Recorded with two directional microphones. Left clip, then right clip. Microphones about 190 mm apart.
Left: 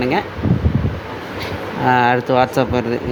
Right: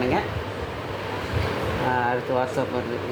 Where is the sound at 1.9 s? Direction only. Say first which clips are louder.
Left 11 dB; 45° left (ahead or behind).